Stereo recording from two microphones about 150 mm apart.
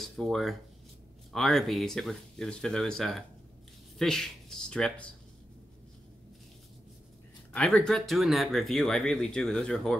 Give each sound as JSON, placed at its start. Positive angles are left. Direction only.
{"t": 0.0, "sound": "speech", "side_deg": 0}
{"t": 7.5, "sound": "speech", "side_deg": 5}